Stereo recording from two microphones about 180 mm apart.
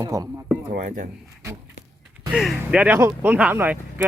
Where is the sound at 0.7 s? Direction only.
45° right (ahead or behind).